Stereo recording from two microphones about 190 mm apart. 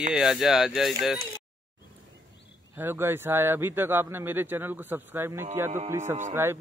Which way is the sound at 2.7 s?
10° right (ahead or behind).